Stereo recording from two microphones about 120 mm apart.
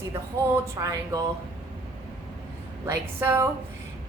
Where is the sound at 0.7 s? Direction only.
25° right (ahead or behind).